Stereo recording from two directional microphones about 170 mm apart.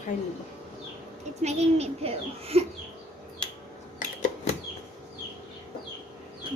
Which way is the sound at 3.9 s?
50° left (ahead or behind).